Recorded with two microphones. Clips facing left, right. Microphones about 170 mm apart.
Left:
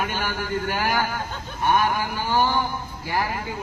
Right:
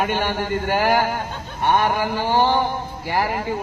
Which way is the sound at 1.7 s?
25° right (ahead or behind).